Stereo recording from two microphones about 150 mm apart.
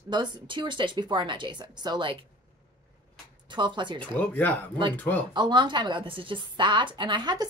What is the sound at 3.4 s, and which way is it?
Speech, 30° right (ahead or behind).